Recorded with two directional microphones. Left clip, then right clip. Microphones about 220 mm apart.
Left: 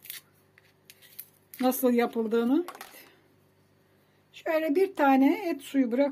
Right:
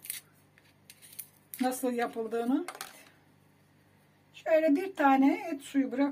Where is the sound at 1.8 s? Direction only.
45° left (ahead or behind).